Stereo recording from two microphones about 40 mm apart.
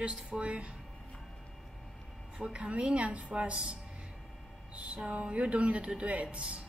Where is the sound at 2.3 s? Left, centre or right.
Right.